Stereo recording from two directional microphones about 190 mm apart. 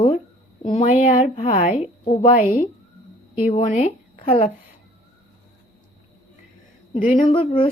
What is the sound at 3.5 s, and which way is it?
Speech, 35° left (ahead or behind).